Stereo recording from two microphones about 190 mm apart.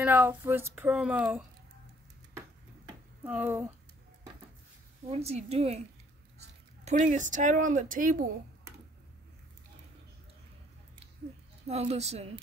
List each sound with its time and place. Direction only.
0.0 s a sound: 10° right (ahead or behind)
0.4 s speech: 10° right (ahead or behind)
3.3 s speech: 10° right (ahead or behind)
5.1 s speech: 35° right (ahead or behind)
6.8 s speech: 40° right (ahead or behind)
11.6 s speech: 35° right (ahead or behind)